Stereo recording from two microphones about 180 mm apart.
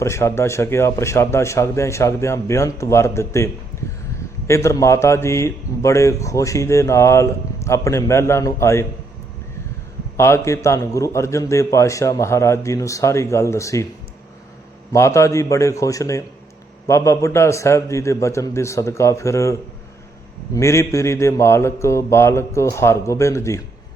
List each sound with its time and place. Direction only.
0.0 s a man's voice: 15° left (ahead or behind)
10.2 s a man's voice: 15° left (ahead or behind)
14.9 s a man's voice: 15° left (ahead or behind)